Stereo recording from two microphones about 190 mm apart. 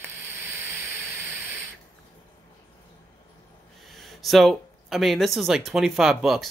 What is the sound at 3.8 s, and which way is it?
Speech, centre (ahead or behind).